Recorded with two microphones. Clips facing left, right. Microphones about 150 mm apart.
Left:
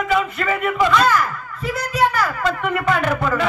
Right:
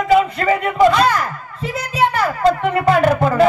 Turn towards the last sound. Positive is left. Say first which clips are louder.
# right 5 dB
turn(degrees=-35)  # may be behind; listen again after turning